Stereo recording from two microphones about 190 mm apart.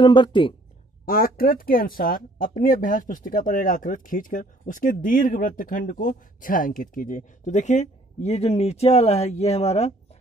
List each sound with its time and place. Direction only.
0.0 s speech: 25° left (ahead or behind)
1.0 s speech: 50° left (ahead or behind); by 9.9 s 35° left (ahead or behind)